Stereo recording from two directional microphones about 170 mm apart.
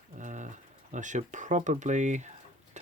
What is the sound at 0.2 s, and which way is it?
Speech, 45° right (ahead or behind).